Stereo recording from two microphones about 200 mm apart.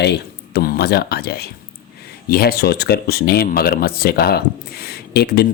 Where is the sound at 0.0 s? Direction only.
55° left (ahead or behind).